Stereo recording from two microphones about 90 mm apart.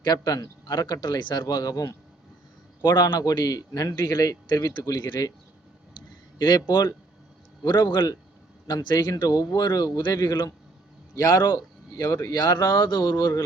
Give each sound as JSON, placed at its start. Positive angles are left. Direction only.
{"t": 0.0, "sound": "a man's voice", "side_deg": 45}
{"t": 2.8, "sound": "a man's voice", "side_deg": 55}
{"t": 3.9, "sound": "speech", "side_deg": 30}
{"t": 6.7, "sound": "a man's voice", "side_deg": 50}